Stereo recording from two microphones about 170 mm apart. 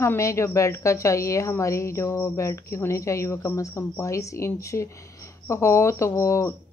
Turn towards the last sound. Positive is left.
turn(degrees=15)  # may be behind; listen again after turning